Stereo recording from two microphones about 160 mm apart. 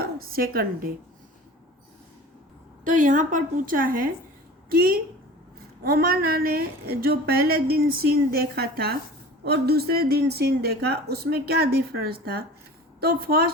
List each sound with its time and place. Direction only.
0.0 s speech: 65° right (ahead or behind)
2.8 s a woman's voice: 55° right (ahead or behind)